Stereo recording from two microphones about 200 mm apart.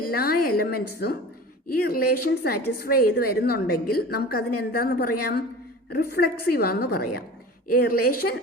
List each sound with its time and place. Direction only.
0.0 s a woman's voice: 50° left (ahead or behind)